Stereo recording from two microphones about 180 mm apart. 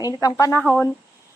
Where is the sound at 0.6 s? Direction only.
Centre (ahead or behind).